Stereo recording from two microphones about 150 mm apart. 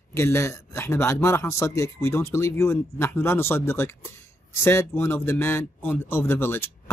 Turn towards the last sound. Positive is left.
turn(degrees=15)  # may be behind; listen again after turning